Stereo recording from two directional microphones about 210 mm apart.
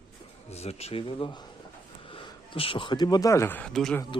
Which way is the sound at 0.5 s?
30° left (ahead or behind).